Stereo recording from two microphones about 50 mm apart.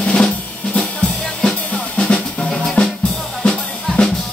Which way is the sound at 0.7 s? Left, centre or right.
Centre.